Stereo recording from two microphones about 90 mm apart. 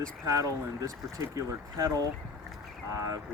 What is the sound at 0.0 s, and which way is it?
Speech, 40° right (ahead or behind).